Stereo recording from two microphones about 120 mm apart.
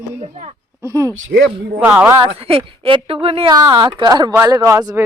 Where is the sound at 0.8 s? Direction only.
25° right (ahead or behind).